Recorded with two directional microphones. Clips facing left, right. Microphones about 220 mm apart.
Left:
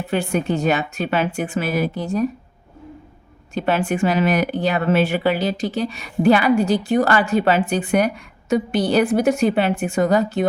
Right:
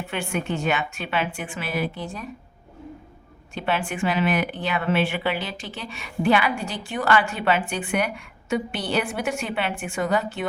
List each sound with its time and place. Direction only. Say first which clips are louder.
0.1 s speech: left 8 dB; 35° left (ahead or behind)
3.5 s speech: left 6 dB; 40° left (ahead or behind)